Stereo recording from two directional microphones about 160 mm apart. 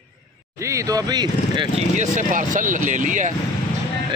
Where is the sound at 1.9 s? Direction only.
50° right (ahead or behind).